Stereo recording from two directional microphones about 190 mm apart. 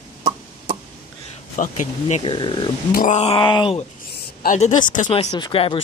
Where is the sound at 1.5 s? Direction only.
40° left (ahead or behind).